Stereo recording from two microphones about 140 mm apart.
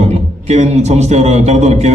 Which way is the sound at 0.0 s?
50° right (ahead or behind).